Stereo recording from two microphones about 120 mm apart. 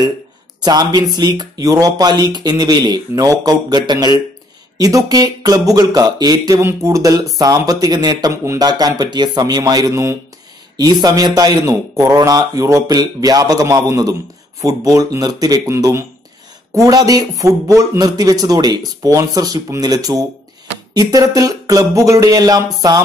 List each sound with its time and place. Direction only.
0.7 s a man's voice: 35° right (ahead or behind)